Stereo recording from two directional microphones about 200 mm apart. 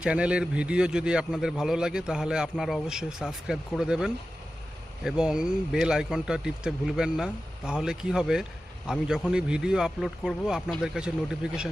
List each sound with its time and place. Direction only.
0.0 s speech: 5° right (ahead or behind)